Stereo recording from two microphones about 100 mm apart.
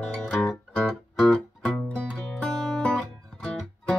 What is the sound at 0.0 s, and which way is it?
Music, 10° left (ahead or behind).